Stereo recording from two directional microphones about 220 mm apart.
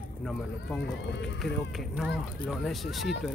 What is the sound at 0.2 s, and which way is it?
Speech, 5° left (ahead or behind).